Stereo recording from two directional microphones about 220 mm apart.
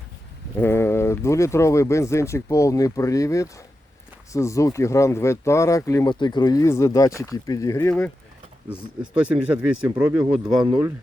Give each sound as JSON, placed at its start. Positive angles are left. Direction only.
{"t": 0.6, "sound": "speech", "side_deg": 10}
{"t": 8.7, "sound": "speech", "side_deg": -5}
{"t": 10.6, "sound": "speech", "side_deg": -15}